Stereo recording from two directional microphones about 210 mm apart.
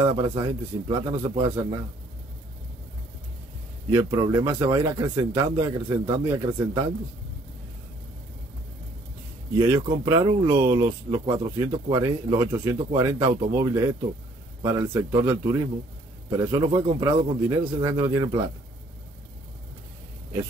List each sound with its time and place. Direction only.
0.1 s a man's voice: 20° right (ahead or behind)
3.9 s speech: 15° right (ahead or behind)
9.6 s speech: 20° right (ahead or behind)